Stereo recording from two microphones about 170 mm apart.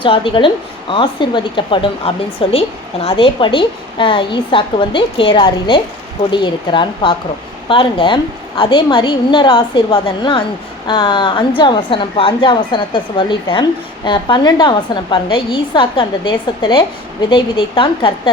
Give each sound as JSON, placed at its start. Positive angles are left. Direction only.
{"t": 0.0, "sound": "a woman's voice", "side_deg": 30}